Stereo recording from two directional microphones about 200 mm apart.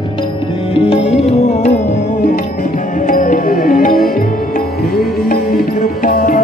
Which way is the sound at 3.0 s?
40° left (ahead or behind).